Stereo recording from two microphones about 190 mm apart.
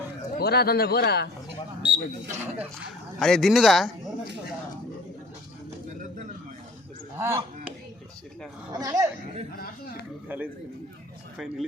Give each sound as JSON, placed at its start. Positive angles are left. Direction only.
{"t": 0.3, "sound": "speech", "side_deg": 55}
{"t": 1.8, "sound": "speech", "side_deg": -10}
{"t": 3.2, "sound": "speech", "side_deg": 0}
{"t": 7.2, "sound": "a man's voice", "side_deg": -15}
{"t": 8.7, "sound": "speech", "side_deg": -20}
{"t": 10.2, "sound": "a man's voice", "side_deg": -10}